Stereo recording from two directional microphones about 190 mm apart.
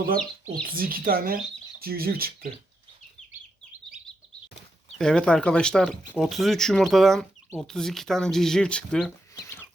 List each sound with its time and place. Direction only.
0.8 s speech: 50° right (ahead or behind)
4.9 s speech: 5° left (ahead or behind)